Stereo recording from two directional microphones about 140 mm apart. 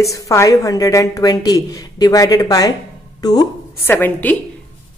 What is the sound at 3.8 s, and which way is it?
Speech, 15° left (ahead or behind).